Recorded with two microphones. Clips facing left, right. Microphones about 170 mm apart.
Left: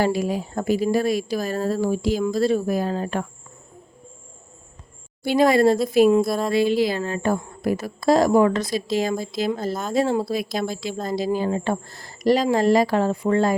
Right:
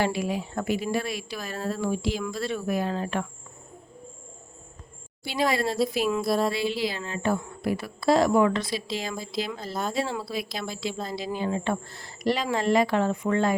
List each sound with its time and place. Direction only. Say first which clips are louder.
0.0 s speech: left 5 dB; 40° left (ahead or behind)
5.2 s a woman's voice: left 9 dB; 50° left (ahead or behind)
6.2 s a sound: even; centre (ahead or behind)
6.5 s a woman's voice: left 8 dB; 50° left (ahead or behind)